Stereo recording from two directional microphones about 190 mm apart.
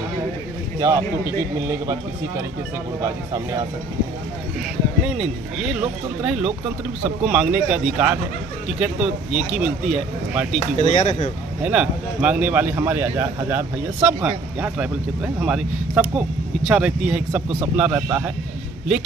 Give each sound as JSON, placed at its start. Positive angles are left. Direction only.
{"t": 0.7, "sound": "speech", "side_deg": -15}
{"t": 5.0, "sound": "speech", "side_deg": -5}
{"t": 10.8, "sound": "speech", "side_deg": 40}
{"t": 11.6, "sound": "speech", "side_deg": -5}